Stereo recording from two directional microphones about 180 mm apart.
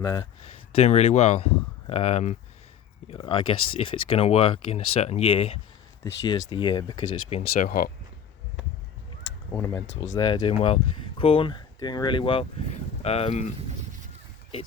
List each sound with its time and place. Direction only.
0.0 s speech: 20° left (ahead or behind)
0.4 s speech: 35° left (ahead or behind)
3.1 s speech: 30° left (ahead or behind)
7.7 s speech: 50° left (ahead or behind)
9.5 s speech: 15° left (ahead or behind)
9.8 s speech: 35° left (ahead or behind)